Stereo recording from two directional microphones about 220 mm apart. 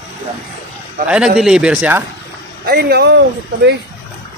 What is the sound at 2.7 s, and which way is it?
Speech, 45° right (ahead or behind).